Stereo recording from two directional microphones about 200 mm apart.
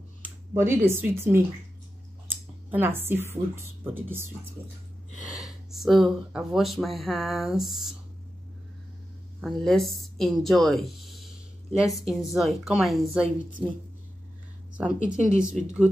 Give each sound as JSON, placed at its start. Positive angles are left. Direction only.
{"t": 0.2, "sound": "speech", "side_deg": -10}
{"t": 2.7, "sound": "a woman's voice", "side_deg": -10}
{"t": 5.3, "sound": "speech", "side_deg": 0}
{"t": 9.4, "sound": "speech", "side_deg": 0}
{"t": 15.0, "sound": "speech", "side_deg": -5}